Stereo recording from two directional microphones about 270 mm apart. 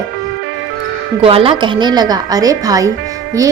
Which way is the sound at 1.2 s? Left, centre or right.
Centre.